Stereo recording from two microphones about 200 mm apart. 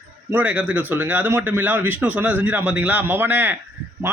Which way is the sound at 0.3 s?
10° right (ahead or behind).